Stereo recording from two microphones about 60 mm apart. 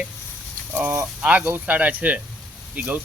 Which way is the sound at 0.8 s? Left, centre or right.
Right.